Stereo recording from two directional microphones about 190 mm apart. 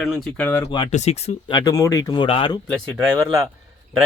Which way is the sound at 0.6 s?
30° left (ahead or behind).